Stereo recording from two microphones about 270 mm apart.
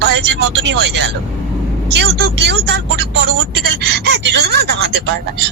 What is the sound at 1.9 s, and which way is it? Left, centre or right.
Speech, right.